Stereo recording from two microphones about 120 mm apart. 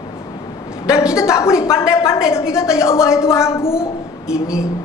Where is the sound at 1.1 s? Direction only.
25° left (ahead or behind).